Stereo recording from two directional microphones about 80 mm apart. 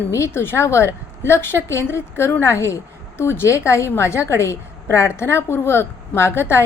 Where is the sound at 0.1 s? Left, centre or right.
Left.